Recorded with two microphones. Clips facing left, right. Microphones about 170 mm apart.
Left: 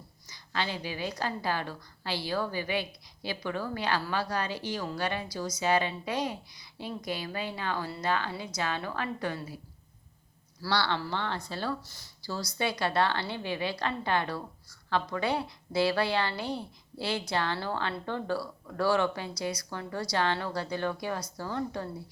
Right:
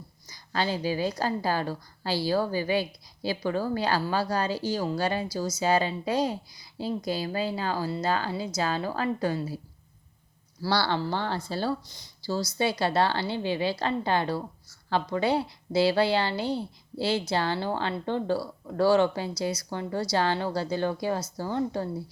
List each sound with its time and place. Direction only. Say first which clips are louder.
0.3 s a woman's voice: right 5 dB; 40° right (ahead or behind)
10.7 s a woman's voice: right 4 dB; 35° right (ahead or behind)